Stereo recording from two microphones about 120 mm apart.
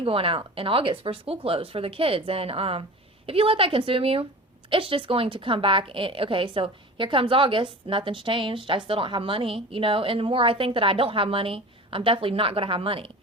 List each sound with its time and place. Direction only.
0.0 s a woman's voice: 50° right (ahead or behind)